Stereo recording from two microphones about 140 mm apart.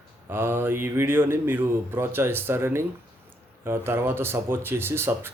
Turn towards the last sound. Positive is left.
turn(degrees=-15)  # may be behind; listen again after turning